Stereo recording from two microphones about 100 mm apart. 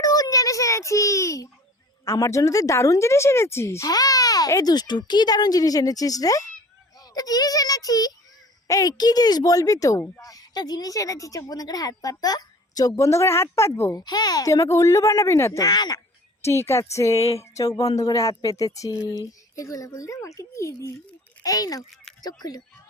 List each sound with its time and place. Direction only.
0.0 s a sound: 35° left (ahead or behind)
2.1 s speech: 30° left (ahead or behind)
13.9 s speech: 45° left (ahead or behind); by 15.6 s 25° left (ahead or behind)
15.6 s speech: 40° left (ahead or behind)
16.4 s speech: 25° left (ahead or behind)
17.2 s a sound: 90° left
17.4 s speech: 35° left (ahead or behind)